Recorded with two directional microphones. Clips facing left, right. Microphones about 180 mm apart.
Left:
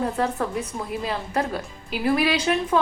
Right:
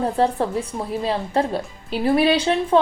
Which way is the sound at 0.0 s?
30° right (ahead or behind).